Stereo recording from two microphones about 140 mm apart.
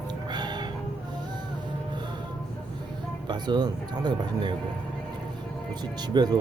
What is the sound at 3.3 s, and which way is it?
Speech, 30° right (ahead or behind).